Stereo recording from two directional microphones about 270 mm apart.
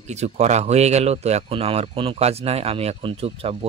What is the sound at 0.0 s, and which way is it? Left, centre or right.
Speech, right.